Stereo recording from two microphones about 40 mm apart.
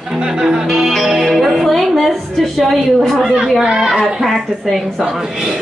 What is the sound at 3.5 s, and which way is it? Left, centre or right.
Speech, centre.